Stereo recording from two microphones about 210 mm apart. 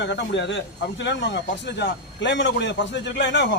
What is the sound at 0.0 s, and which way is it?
Speech, 55° left (ahead or behind).